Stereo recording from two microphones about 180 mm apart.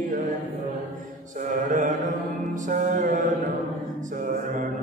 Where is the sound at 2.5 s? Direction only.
45° right (ahead or behind).